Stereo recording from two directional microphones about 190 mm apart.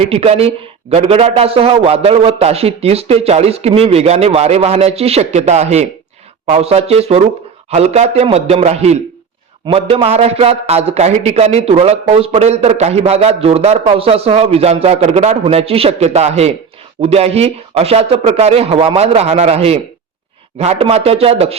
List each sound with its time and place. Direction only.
0.0 s a man's voice: 30° right (ahead or behind)